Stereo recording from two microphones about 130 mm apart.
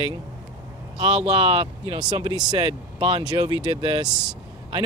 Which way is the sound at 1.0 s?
50° right (ahead or behind).